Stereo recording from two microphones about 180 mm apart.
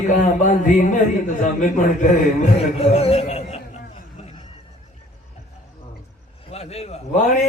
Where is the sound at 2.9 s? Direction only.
35° left (ahead or behind).